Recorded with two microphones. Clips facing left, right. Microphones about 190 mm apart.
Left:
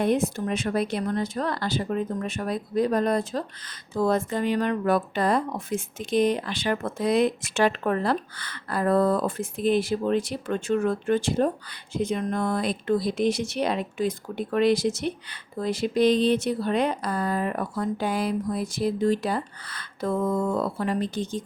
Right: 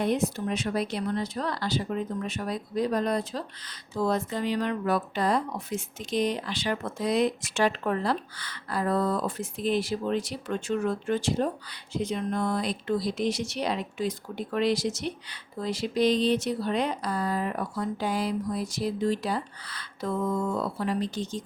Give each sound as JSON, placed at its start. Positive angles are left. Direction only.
{"t": 0.0, "sound": "speech", "side_deg": 50}